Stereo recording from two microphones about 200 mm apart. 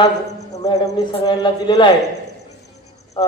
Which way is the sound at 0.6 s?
20° left (ahead or behind).